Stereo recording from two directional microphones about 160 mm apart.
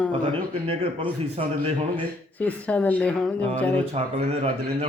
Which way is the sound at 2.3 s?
10° left (ahead or behind).